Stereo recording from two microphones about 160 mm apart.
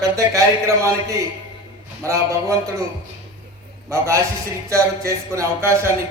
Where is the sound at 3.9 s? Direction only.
20° right (ahead or behind).